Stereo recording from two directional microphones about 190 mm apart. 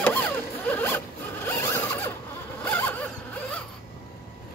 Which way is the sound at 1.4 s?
10° left (ahead or behind).